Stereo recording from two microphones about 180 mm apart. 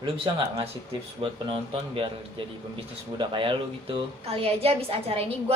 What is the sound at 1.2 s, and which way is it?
A man's voice, 30° right (ahead or behind).